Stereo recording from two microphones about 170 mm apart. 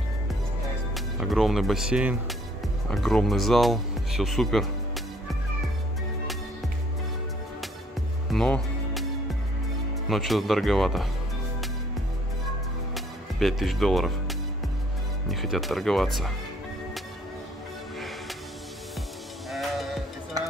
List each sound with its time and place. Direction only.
0.9 s speech: centre (ahead or behind)
8.3 s music: centre (ahead or behind)
10.0 s speech: centre (ahead or behind)
12.9 s music: centre (ahead or behind)
15.2 s speech: centre (ahead or behind)
19.5 s sheep: centre (ahead or behind)